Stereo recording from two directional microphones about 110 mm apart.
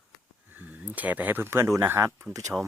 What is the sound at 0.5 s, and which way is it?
Speech, 15° right (ahead or behind).